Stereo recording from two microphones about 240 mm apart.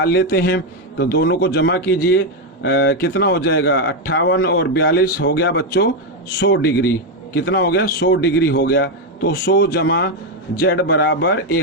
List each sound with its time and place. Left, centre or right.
0.0 s a man's voice: left